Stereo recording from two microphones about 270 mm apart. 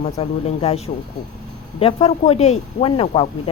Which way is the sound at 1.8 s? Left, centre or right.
Left.